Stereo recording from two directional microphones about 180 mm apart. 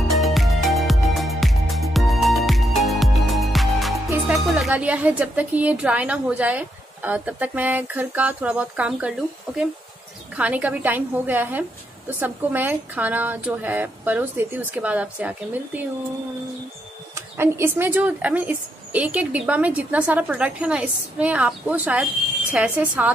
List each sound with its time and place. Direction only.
0.1 s music: centre (ahead or behind)
4.3 s a woman's voice: 5° right (ahead or behind)
10.3 s a woman's voice: 10° right (ahead or behind)
17.1 s a woman's voice: 15° right (ahead or behind)